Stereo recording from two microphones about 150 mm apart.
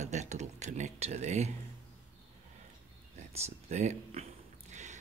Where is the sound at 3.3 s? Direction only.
50° right (ahead or behind).